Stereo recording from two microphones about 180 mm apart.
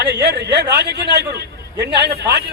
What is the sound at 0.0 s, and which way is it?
A man's voice, 70° right (ahead or behind).